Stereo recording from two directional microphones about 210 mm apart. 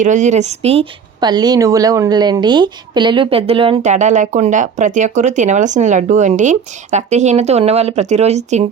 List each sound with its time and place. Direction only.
0.0 s speech: 35° right (ahead or behind)